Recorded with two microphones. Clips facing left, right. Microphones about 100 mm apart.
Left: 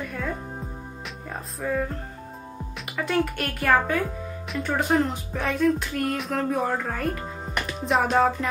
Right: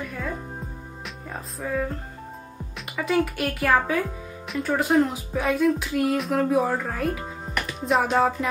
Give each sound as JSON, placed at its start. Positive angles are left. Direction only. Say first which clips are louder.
{"t": 0.0, "sound": "music", "louder": "even", "side_deg": 0}
{"t": 1.3, "sound": "speech", "louder": "left 1 dB", "side_deg": 0}
{"t": 3.0, "sound": "speech", "louder": "right 2 dB", "side_deg": 0}